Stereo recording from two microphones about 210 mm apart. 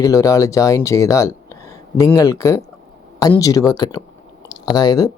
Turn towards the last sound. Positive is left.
turn(degrees=15)  # may be behind; listen again after turning